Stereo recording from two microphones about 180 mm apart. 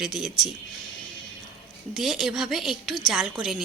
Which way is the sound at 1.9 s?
Centre (ahead or behind).